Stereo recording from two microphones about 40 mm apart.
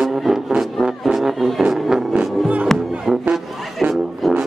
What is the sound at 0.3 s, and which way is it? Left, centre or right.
Music, centre.